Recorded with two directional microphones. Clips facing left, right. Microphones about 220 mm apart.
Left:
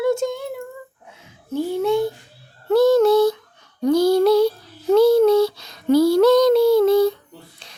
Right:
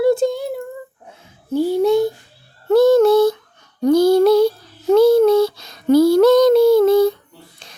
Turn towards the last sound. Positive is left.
turn(degrees=-45)  # may be behind; listen again after turning